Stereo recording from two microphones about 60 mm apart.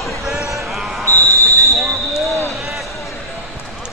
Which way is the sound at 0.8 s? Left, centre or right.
Centre.